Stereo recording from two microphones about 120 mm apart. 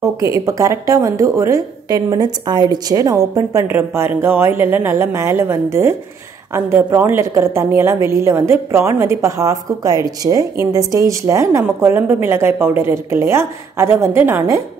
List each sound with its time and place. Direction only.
0.0 s a woman's voice: 25° right (ahead or behind)